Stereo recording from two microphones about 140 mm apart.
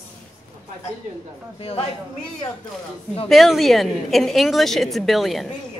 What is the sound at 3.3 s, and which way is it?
A woman's voice, centre (ahead or behind).